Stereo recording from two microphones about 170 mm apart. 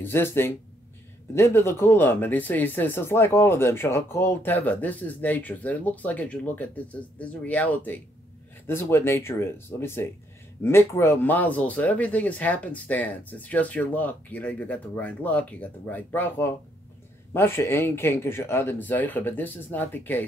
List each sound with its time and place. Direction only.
0.0 s speech: 15° left (ahead or behind)